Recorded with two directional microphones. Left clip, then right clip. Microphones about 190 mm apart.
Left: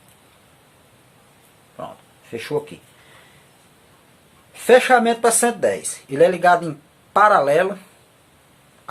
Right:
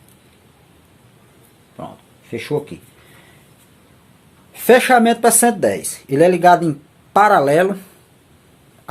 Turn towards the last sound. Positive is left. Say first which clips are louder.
# right 2 dB
turn(degrees=-30)  # may be behind; listen again after turning